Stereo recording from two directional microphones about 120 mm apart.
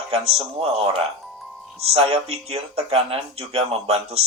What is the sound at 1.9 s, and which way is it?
Speech, 55° right (ahead or behind).